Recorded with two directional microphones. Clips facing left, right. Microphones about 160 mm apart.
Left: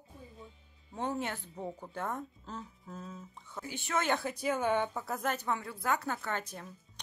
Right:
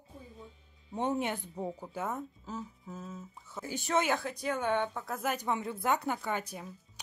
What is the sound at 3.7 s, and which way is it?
Speech, 40° right (ahead or behind).